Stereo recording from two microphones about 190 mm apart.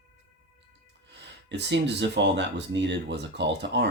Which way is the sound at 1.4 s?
65° right (ahead or behind).